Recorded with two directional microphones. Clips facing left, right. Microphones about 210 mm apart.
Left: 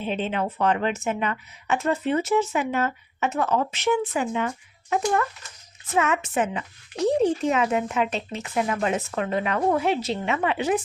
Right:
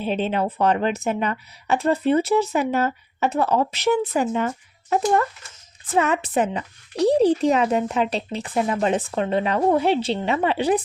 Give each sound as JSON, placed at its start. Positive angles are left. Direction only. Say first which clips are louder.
{"t": 0.0, "sound": "speech", "louder": "right 4 dB", "side_deg": -35}